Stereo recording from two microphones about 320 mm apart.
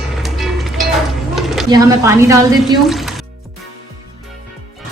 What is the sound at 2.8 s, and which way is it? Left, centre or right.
Speech, centre.